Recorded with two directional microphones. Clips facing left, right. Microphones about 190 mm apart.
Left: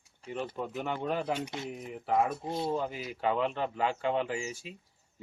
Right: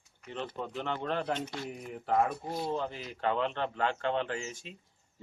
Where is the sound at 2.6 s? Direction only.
10° left (ahead or behind).